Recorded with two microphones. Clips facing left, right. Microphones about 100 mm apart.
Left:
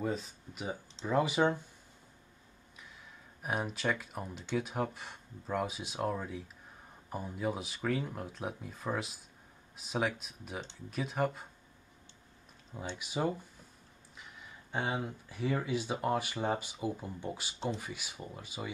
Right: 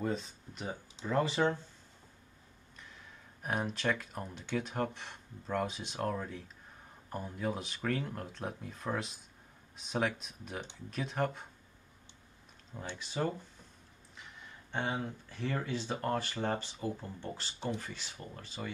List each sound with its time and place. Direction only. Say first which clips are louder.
0.0 s speech: even; centre (ahead or behind)
3.4 s speech: even; 5° left (ahead or behind)
12.8 s speech: left 2 dB; 15° left (ahead or behind)